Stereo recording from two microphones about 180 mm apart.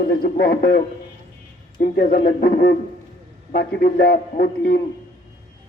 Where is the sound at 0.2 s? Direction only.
60° left (ahead or behind).